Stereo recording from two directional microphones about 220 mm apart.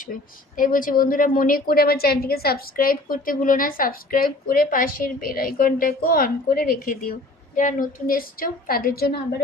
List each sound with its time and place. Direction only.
0.5 s a woman's voice: 40° left (ahead or behind)